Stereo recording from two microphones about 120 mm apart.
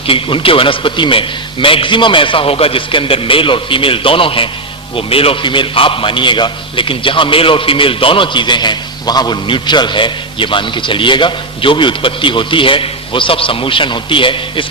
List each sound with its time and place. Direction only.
0.1 s a man's voice: 50° left (ahead or behind)